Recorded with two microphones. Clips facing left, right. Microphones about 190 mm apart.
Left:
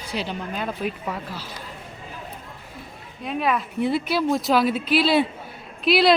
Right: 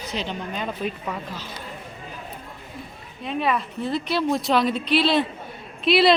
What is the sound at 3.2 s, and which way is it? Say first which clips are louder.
Speech: even; centre (ahead or behind).